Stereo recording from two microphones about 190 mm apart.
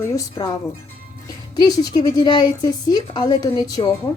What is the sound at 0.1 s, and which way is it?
Speech, 20° left (ahead or behind).